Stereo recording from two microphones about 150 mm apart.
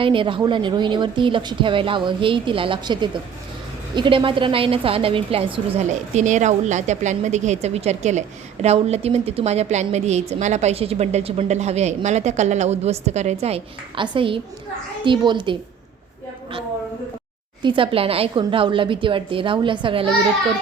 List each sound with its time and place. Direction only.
0.0 s a woman's voice: 35° right (ahead or behind)
17.6 s speech: 35° right (ahead or behind)